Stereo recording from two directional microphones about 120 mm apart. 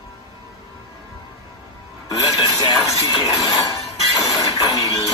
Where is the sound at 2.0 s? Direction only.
30° left (ahead or behind).